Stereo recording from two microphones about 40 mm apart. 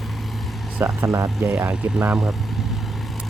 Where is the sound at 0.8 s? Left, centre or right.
Right.